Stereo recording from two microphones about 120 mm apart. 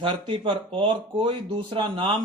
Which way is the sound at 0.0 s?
45° right (ahead or behind).